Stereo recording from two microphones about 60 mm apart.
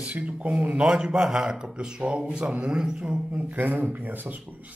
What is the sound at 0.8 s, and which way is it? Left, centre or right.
Speech, centre.